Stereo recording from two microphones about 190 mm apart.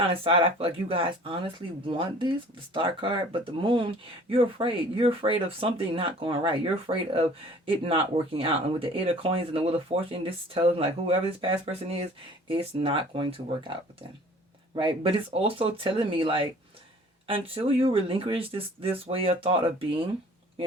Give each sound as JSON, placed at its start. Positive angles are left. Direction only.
{"t": 0.0, "sound": "speech", "side_deg": -30}
{"t": 14.8, "sound": "speech", "side_deg": -30}